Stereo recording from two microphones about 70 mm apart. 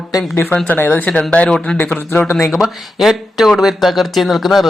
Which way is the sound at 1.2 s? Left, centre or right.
Centre.